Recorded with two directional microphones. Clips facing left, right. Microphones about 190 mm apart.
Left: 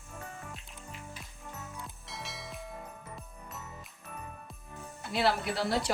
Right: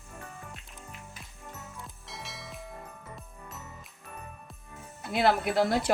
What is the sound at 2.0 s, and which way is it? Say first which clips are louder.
Music: right 1 dB; centre (ahead or behind).